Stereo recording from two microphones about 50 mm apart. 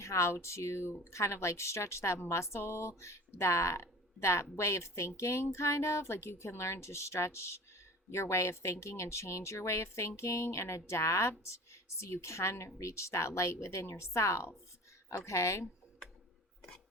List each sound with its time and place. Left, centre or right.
0.0 s speech: left
1.1 s speech: left
15.1 s speech: left